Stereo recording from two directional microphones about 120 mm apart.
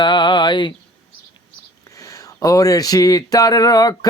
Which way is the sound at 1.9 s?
25° left (ahead or behind).